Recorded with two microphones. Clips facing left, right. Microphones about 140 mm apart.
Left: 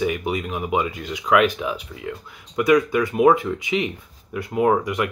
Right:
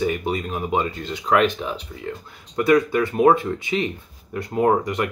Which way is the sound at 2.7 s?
35° right (ahead or behind).